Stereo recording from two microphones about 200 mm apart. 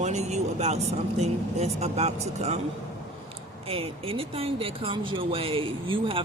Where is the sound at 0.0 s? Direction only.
35° right (ahead or behind).